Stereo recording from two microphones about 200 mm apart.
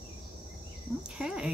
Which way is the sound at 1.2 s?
5° right (ahead or behind).